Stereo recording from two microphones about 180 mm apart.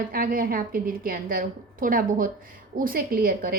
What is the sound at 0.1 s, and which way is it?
A woman's voice, 55° right (ahead or behind).